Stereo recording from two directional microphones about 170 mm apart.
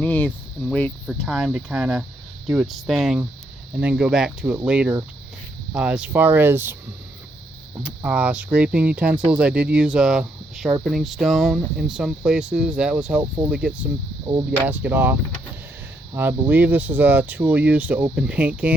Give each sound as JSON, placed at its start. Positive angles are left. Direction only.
{"t": 0.0, "sound": "a sound", "side_deg": 10}
{"t": 0.6, "sound": "speech", "side_deg": 10}
{"t": 7.8, "sound": "speech", "side_deg": -5}
{"t": 14.3, "sound": "speech", "side_deg": -25}
{"t": 14.7, "sound": "speech", "side_deg": -10}